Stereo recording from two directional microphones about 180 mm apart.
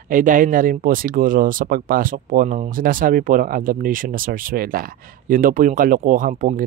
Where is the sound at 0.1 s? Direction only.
45° right (ahead or behind).